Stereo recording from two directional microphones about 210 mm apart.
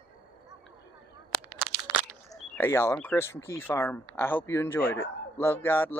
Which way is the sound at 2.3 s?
10° left (ahead or behind).